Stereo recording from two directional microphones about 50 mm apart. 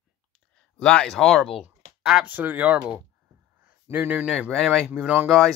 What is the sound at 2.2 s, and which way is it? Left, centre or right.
Speech, right.